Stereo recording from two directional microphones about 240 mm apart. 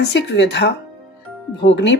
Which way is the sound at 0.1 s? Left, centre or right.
Left.